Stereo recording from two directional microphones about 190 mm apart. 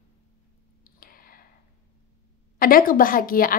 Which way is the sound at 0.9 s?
50° left (ahead or behind).